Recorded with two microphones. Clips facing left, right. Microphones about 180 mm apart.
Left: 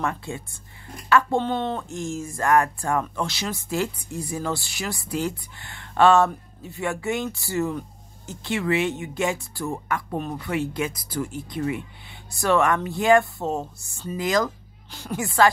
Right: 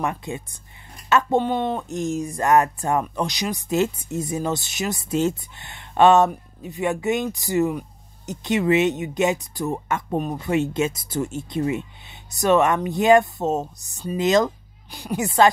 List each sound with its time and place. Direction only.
0.0 s speech: 20° right (ahead or behind)